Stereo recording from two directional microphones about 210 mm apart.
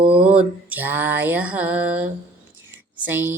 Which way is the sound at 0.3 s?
5° right (ahead or behind).